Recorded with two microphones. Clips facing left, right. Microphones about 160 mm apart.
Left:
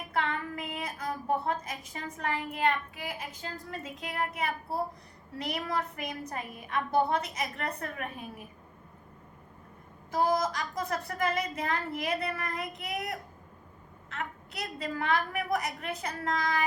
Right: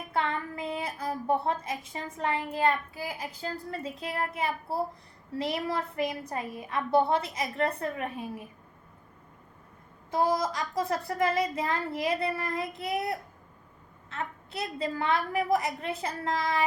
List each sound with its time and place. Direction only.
0.1 s a woman's voice: 30° right (ahead or behind)
10.1 s a woman's voice: 30° right (ahead or behind)